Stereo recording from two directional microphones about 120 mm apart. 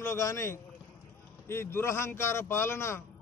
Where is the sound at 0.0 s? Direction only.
25° left (ahead or behind).